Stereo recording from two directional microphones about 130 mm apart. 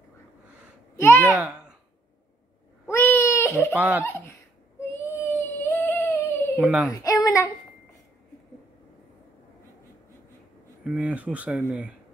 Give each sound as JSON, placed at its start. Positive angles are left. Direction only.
{"t": 1.0, "sound": "a child's voice", "side_deg": 20}
{"t": 2.9, "sound": "baby cry", "side_deg": 20}
{"t": 3.7, "sound": "speech", "side_deg": -10}
{"t": 5.1, "sound": "humming", "side_deg": 20}
{"t": 6.6, "sound": "speech", "side_deg": -10}
{"t": 6.9, "sound": "a sound", "side_deg": 30}
{"t": 10.8, "sound": "speech", "side_deg": -10}